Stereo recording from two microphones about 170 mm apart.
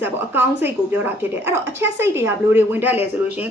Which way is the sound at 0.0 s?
10° right (ahead or behind).